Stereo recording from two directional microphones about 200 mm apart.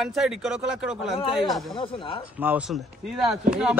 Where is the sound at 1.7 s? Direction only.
25° left (ahead or behind).